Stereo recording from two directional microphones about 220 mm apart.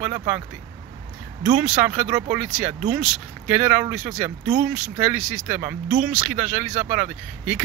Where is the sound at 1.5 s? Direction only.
10° right (ahead or behind).